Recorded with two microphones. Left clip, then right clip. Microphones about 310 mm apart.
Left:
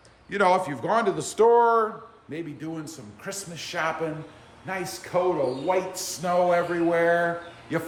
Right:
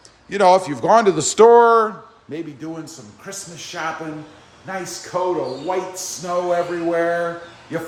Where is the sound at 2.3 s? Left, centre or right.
Centre.